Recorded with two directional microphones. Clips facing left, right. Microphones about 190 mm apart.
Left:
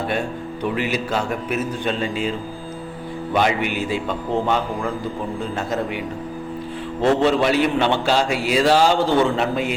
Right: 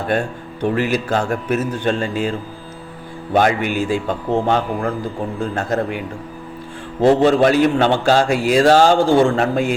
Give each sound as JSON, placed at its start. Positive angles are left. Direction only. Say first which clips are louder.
{"t": 0.7, "sound": "speech", "louder": "right 5 dB", "side_deg": -50}
{"t": 3.3, "sound": "speech", "louder": "right 4 dB", "side_deg": -45}
{"t": 7.0, "sound": "a man's voice", "louder": "right 4 dB", "side_deg": -35}
{"t": 7.4, "sound": "speech", "louder": "right 4 dB", "side_deg": -45}